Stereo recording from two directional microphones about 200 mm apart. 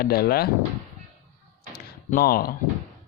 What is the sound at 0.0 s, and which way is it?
Speech, 50° left (ahead or behind).